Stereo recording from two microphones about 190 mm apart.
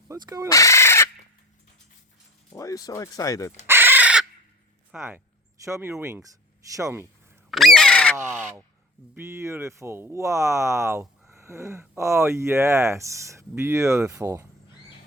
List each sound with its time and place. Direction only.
0.1 s speech: 20° right (ahead or behind)
0.4 s speech: 15° left (ahead or behind)
2.5 s speech: 15° left (ahead or behind)
3.7 s crow: 10° right (ahead or behind)
4.9 s speech: 5° right (ahead or behind)
7.5 s speech: centre (ahead or behind)
8.1 s speech: 10° right (ahead or behind)